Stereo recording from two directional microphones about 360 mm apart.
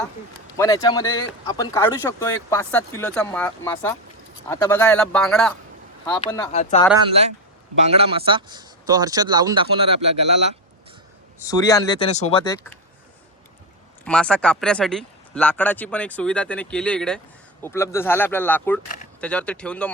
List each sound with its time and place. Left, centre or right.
0.5 s speech: centre
7.9 s speech: centre
11.3 s speech: centre
14.0 s speech: centre